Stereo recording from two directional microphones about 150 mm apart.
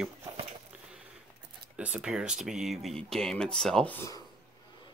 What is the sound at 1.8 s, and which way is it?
Speech, 5° right (ahead or behind).